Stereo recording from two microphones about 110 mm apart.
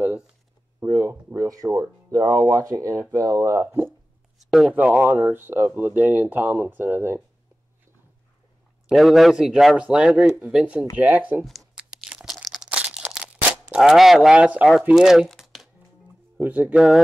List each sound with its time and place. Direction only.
0.7 s a sound: 25° right (ahead or behind)
2.4 s speech: 30° right (ahead or behind)
4.5 s speech: 5° right (ahead or behind)
4.7 s speech: 15° right (ahead or behind)
8.8 s speech: centre (ahead or behind)
10.2 s speech: 20° right (ahead or behind)
10.5 s speech: 10° right (ahead or behind)
11.4 s tearing: 5° right (ahead or behind)
12.6 s a sound: 10° right (ahead or behind)
16.3 s speech: 15° right (ahead or behind)